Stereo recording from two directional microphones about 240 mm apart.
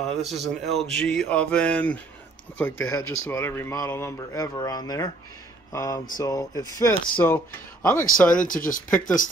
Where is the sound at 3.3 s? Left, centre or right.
Centre.